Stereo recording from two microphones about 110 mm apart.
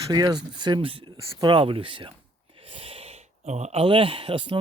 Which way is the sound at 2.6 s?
60° right (ahead or behind).